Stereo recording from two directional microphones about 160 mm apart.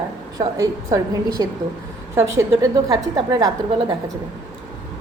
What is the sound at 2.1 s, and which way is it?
A woman's voice, 20° right (ahead or behind).